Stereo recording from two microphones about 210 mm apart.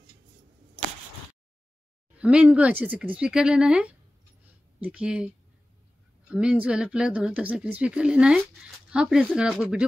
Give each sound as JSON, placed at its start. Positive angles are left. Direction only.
{"t": 2.1, "sound": "speech", "side_deg": -5}